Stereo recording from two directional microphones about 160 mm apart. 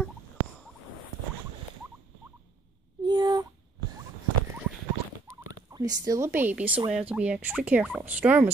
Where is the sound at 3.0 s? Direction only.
25° right (ahead or behind).